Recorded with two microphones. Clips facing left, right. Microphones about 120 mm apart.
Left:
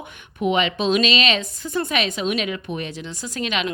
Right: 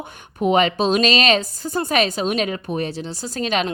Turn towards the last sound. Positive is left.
turn(degrees=-35)  # may be behind; listen again after turning